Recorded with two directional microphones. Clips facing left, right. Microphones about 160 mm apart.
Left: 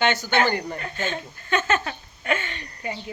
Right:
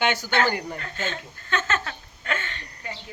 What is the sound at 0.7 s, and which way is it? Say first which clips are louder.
Speech: left 3 dB; 15° left (ahead or behind).